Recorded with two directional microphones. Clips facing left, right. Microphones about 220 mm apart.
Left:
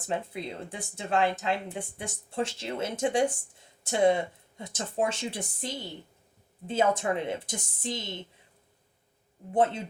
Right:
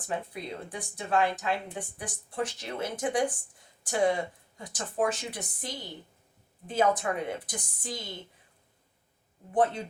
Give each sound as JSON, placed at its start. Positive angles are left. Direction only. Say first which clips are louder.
{"t": 0.0, "sound": "a woman's voice", "louder": "left 2 dB", "side_deg": 25}
{"t": 9.5, "sound": "a woman's voice", "louder": "left 1 dB", "side_deg": 25}